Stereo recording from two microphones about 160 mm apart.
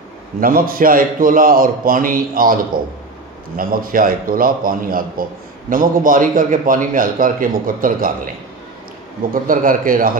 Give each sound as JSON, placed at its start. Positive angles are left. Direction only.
{"t": 0.4, "sound": "a man's voice", "side_deg": -65}
{"t": 9.3, "sound": "a man's voice", "side_deg": -60}